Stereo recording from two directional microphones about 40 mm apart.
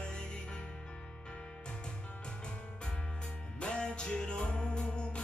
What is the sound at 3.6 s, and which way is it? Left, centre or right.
Music, left.